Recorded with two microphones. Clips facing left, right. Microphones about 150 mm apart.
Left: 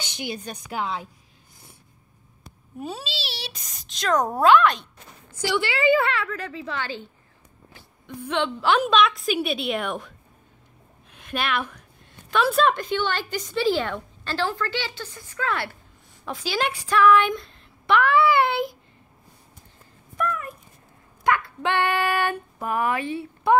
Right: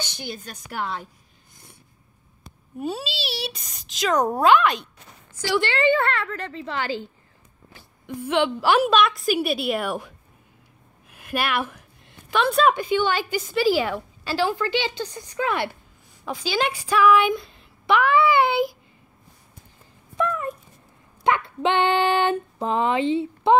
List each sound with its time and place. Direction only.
2.8 s a woman's voice: centre (ahead or behind)
6.2 s female singing: 30° right (ahead or behind)
8.2 s a woman's voice: 5° right (ahead or behind)
12.7 s a woman's voice: 10° right (ahead or behind)
16.3 s a woman's voice: centre (ahead or behind)
20.2 s a sound: 25° right (ahead or behind)
21.2 s female singing: 20° right (ahead or behind)